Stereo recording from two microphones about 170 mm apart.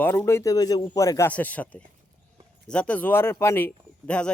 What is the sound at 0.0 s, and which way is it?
Speech, 10° left (ahead or behind).